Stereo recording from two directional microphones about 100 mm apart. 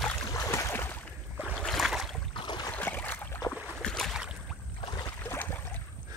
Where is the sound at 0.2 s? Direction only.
30° left (ahead or behind).